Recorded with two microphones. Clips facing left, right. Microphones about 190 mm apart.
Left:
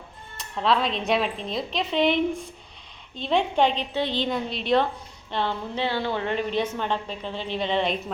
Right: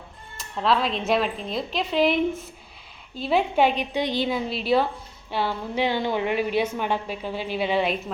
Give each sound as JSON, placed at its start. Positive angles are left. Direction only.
{"t": 0.3, "sound": "a woman's voice", "side_deg": 0}